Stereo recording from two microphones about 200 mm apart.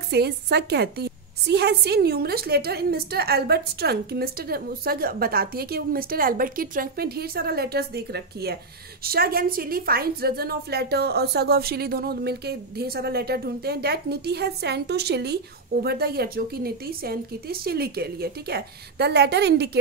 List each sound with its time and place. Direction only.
0.1 s a woman's voice: 55° right (ahead or behind)